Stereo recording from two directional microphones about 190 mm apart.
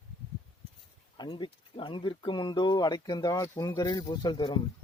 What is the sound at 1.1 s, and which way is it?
Speech, 25° left (ahead or behind).